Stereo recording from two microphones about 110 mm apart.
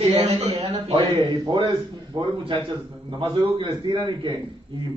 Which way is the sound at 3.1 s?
45° right (ahead or behind).